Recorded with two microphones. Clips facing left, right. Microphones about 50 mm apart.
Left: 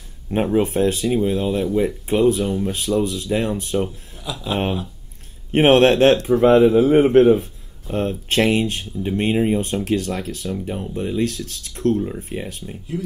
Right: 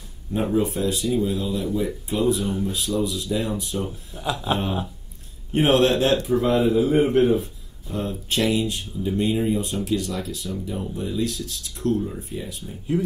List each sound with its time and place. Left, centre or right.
0.3 s speech: left
4.1 s speech: right
5.5 s speech: left